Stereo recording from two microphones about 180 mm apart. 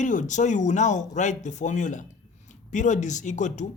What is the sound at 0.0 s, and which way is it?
Speech, 45° left (ahead or behind).